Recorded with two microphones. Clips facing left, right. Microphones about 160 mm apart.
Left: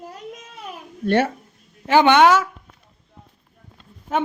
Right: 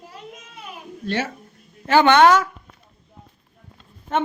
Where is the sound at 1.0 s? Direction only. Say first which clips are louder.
Left 7 dB; 55° left (ahead or behind).